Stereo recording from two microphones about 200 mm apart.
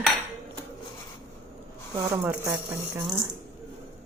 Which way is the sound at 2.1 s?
15° right (ahead or behind).